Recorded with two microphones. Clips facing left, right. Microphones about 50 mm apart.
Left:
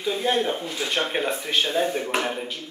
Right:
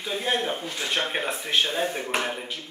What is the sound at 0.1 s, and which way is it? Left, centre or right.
Speech, centre.